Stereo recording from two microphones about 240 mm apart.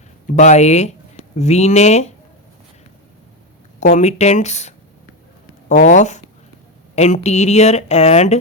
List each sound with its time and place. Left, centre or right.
0.3 s speech: left
3.9 s speech: left